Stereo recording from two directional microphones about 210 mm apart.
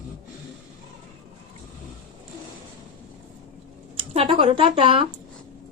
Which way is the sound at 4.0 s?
25° right (ahead or behind).